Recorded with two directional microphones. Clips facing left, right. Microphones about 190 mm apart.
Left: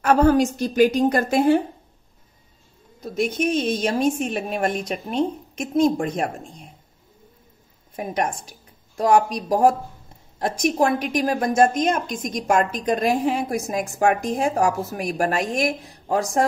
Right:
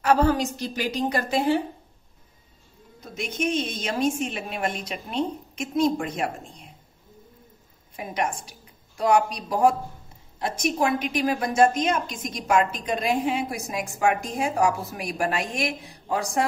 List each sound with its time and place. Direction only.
0.0 s a woman's voice: 50° left (ahead or behind)
3.7 s a woman's voice: 45° left (ahead or behind)
7.9 s a woman's voice: 45° left (ahead or behind)